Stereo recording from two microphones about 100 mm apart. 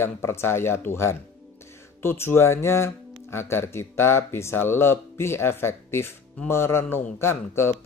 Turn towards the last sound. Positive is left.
turn(degrees=25)  # may be behind; listen again after turning